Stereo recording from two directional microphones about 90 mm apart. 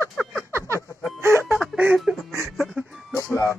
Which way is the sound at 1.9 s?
Centre (ahead or behind).